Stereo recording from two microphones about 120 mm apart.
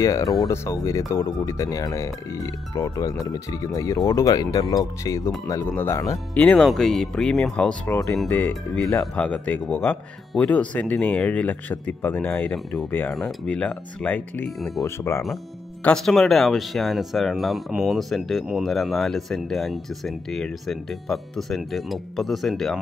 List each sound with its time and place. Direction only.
0.0 s speech: 25° left (ahead or behind)
6.4 s speech: 5° left (ahead or behind)
13.1 s speech: 5° left (ahead or behind)
14.8 s speech: 25° left (ahead or behind)
15.8 s speech: 5° left (ahead or behind)